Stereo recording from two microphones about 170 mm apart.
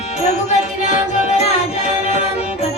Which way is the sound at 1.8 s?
40° left (ahead or behind).